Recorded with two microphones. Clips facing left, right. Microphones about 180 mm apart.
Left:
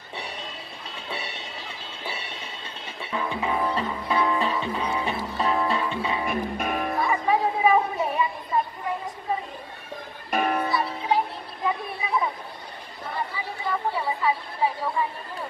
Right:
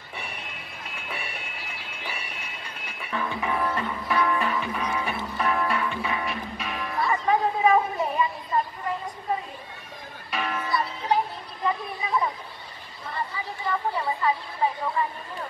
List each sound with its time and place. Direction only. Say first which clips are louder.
0.9 s music: left 2 dB; 25° left (ahead or behind)
6.2 s music: left 5 dB; 50° left (ahead or behind)
7.1 s chatter: right 2 dB; 10° left (ahead or behind)
10.3 s music: left 6 dB; 45° left (ahead or behind)
10.7 s music: left 1 dB; centre (ahead or behind)
13.7 s a woman's voice: even; 5° left (ahead or behind)